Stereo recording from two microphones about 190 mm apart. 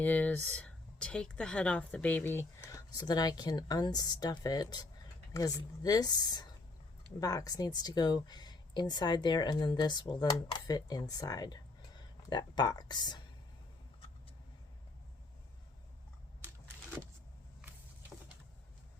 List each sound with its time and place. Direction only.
0.0 s speech: 10° left (ahead or behind)